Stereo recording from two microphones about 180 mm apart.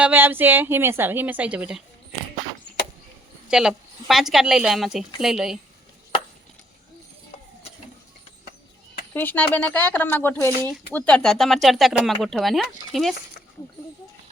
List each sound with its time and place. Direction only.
0.0 s a woman's voice: 10° right (ahead or behind)
3.5 s speech: 5° right (ahead or behind)
9.1 s speech: 10° left (ahead or behind)